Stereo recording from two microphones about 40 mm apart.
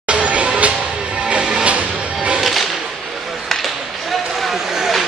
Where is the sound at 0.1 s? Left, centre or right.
Right.